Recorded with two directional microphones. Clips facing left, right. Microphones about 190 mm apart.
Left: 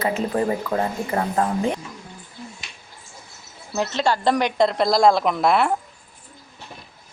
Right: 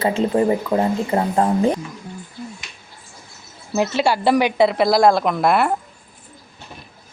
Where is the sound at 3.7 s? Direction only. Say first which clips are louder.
Right 3 dB; 10° right (ahead or behind).